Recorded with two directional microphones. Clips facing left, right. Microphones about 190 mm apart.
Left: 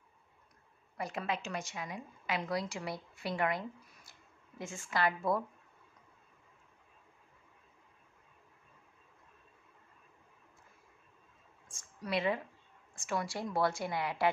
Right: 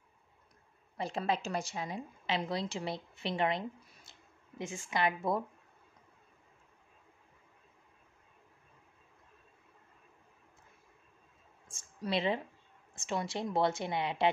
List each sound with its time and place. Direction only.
0.9 s a woman's voice: 30° right (ahead or behind)
11.7 s a sound: 25° right (ahead or behind)
12.9 s a woman's voice: 25° right (ahead or behind)